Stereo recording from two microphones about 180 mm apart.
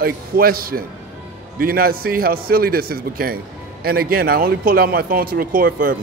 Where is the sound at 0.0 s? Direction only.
55° right (ahead or behind).